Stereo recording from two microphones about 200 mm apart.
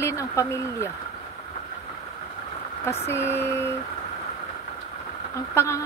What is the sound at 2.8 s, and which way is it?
Speech, 10° left (ahead or behind).